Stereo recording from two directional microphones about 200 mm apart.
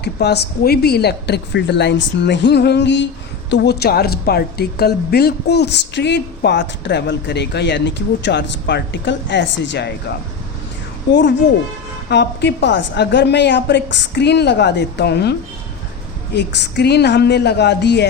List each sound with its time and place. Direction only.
0.0 s a woman's voice: 55° left (ahead or behind)
11.1 s a woman's voice: 60° left (ahead or behind)